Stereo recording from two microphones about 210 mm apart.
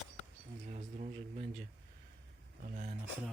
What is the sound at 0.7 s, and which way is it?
Speech, 35° right (ahead or behind).